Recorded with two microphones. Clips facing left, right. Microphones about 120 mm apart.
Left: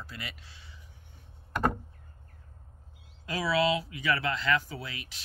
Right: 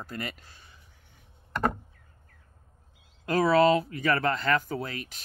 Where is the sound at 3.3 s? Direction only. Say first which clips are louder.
Right 6 dB; 50° right (ahead or behind).